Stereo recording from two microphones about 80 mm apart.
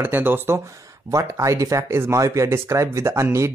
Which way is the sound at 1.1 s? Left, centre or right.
Right.